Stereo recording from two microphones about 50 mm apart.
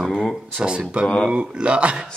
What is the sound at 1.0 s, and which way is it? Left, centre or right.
Speech, centre.